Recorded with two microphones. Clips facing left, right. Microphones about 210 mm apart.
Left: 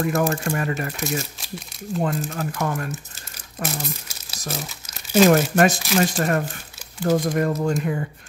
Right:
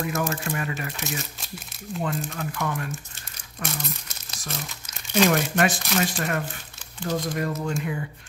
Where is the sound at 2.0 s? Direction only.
40° left (ahead or behind).